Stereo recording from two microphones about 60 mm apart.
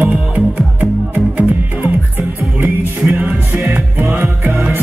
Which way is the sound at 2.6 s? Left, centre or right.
Right.